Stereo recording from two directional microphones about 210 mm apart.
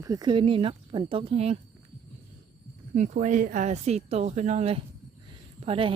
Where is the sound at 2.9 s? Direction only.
35° right (ahead or behind).